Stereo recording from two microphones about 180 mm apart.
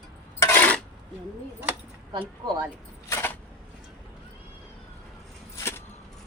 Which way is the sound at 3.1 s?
15° left (ahead or behind).